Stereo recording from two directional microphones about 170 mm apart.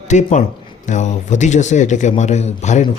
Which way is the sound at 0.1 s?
45° left (ahead or behind).